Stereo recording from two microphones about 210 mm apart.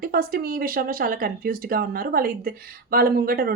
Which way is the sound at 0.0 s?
45° right (ahead or behind).